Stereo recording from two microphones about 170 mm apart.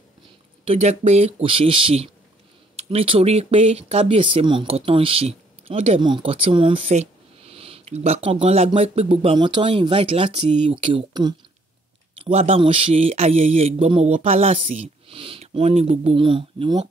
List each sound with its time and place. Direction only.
0.7 s speech: 40° right (ahead or behind)